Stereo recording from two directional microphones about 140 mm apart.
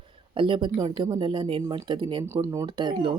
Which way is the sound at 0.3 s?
35° right (ahead or behind).